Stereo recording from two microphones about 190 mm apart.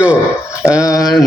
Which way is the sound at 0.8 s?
20° left (ahead or behind).